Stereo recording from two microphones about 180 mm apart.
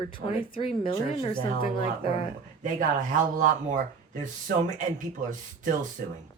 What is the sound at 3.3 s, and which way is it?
Speech, 45° right (ahead or behind).